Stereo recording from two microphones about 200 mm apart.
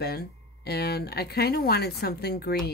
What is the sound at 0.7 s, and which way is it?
Speech, 55° left (ahead or behind).